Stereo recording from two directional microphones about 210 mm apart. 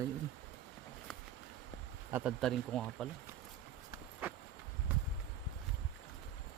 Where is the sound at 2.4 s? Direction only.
Centre (ahead or behind).